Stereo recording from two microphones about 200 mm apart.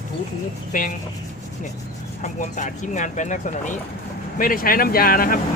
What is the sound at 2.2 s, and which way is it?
Speech, 40° left (ahead or behind).